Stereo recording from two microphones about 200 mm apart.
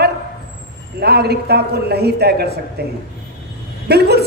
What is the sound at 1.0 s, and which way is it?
Speech, 55° right (ahead or behind).